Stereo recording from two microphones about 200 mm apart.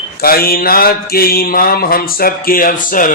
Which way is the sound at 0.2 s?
50° left (ahead or behind).